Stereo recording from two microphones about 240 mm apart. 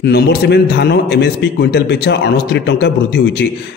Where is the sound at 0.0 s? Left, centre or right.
Left.